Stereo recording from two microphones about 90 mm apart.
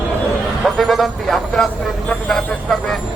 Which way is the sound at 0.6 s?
Centre (ahead or behind).